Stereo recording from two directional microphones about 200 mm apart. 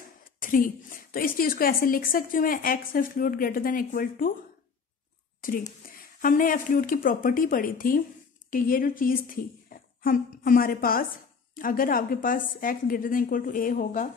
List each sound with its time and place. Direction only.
0.4 s a woman's voice: 45° left (ahead or behind)
5.4 s a woman's voice: 45° left (ahead or behind)